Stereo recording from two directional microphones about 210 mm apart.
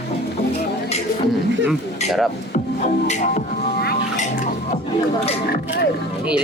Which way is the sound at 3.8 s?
50° left (ahead or behind).